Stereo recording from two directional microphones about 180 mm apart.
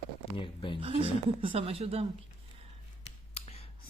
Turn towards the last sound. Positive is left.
turn(degrees=35)  # may be behind; listen again after turning